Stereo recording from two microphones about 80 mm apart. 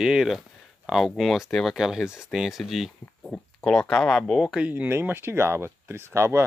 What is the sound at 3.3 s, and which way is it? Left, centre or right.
Speech, centre.